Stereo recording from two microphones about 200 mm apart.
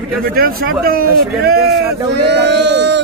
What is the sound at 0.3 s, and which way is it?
Speech, 50° right (ahead or behind).